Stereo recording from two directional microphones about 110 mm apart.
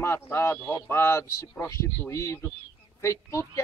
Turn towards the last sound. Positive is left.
turn(degrees=25)  # may be behind; listen again after turning